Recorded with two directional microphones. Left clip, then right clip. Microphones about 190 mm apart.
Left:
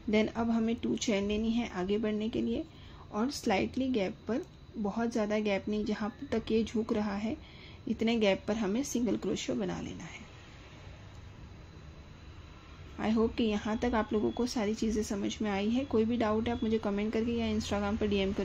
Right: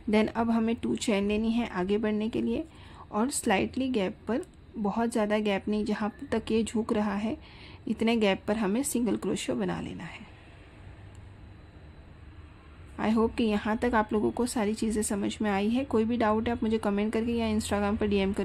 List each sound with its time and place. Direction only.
0.1 s a woman's voice: 20° right (ahead or behind)
12.9 s a woman's voice: 20° right (ahead or behind)